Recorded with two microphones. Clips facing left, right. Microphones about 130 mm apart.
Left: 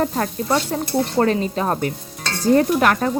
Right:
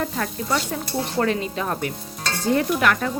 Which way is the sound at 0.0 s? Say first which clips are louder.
Left 5 dB; 35° left (ahead or behind).